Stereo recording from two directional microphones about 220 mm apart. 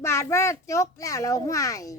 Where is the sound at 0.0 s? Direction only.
10° left (ahead or behind).